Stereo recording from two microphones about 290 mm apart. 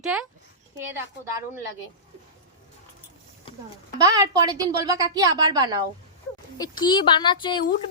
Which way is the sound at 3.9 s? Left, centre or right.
Centre.